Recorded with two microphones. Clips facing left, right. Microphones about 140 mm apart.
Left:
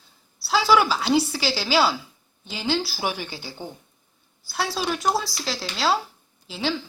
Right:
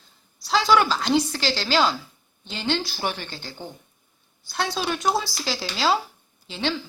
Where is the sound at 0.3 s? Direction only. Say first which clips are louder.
Even; 5° left (ahead or behind).